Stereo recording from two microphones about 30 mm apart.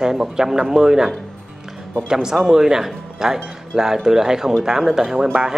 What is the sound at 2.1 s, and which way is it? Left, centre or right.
A woman's voice, centre.